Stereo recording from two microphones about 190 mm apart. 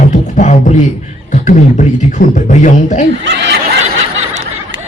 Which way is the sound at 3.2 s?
65° right (ahead or behind).